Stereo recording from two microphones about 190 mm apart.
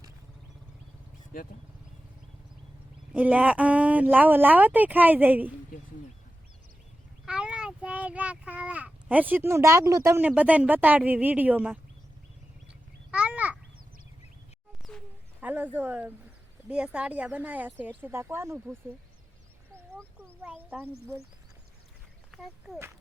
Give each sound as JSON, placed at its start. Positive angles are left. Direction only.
{"t": 1.3, "sound": "speech", "side_deg": 50}
{"t": 3.1, "sound": "speech", "side_deg": -10}
{"t": 7.3, "sound": "speech", "side_deg": -5}
{"t": 13.1, "sound": "a sound", "side_deg": -5}
{"t": 14.8, "sound": "bird", "side_deg": 0}
{"t": 15.4, "sound": "speech", "side_deg": -10}
{"t": 20.4, "sound": "speech", "side_deg": -10}
{"t": 22.3, "sound": "speech", "side_deg": 0}